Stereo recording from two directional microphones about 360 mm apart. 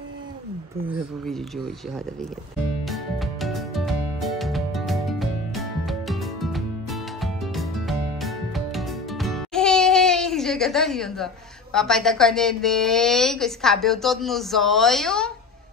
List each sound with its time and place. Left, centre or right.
0.8 s a woman's voice: centre
2.8 s music: centre
11.7 s a woman's voice: centre